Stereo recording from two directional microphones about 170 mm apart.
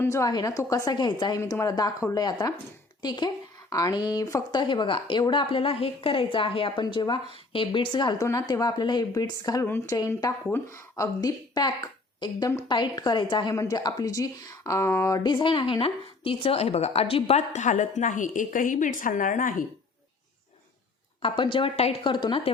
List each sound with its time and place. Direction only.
0.0 s a woman's voice: 15° left (ahead or behind); by 19.6 s 50° left (ahead or behind)
21.2 s a woman's voice: 30° left (ahead or behind)